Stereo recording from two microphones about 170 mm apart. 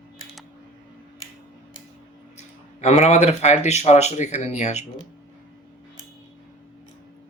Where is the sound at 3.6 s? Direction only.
40° left (ahead or behind).